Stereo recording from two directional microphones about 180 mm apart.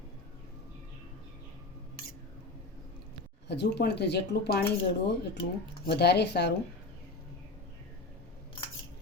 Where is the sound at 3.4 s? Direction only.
70° left (ahead or behind).